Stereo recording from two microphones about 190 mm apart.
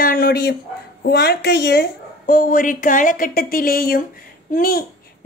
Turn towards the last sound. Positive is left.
turn(degrees=50)  # may be behind; listen again after turning